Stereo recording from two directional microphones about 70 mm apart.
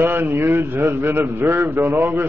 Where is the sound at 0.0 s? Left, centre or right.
Right.